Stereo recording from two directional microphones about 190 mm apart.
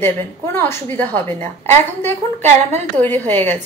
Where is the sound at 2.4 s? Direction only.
35° right (ahead or behind).